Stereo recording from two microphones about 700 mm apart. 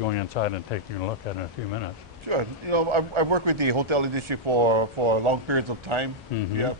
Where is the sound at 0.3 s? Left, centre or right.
Left.